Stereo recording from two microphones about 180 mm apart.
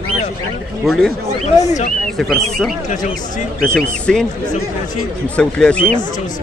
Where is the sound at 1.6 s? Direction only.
40° left (ahead or behind).